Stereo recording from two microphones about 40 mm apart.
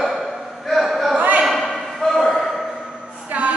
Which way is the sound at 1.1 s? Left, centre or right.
Right.